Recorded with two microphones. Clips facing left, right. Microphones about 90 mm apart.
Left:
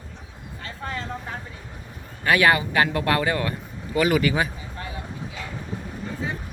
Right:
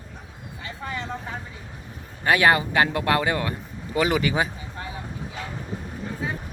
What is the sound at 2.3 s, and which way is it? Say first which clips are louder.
Speech: even; 25° right (ahead or behind).